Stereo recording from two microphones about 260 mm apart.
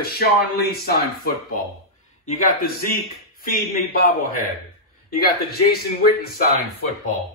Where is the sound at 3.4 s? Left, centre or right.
Left.